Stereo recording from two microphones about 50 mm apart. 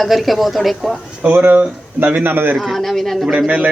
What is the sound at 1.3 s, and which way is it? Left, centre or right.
A man's voice, right.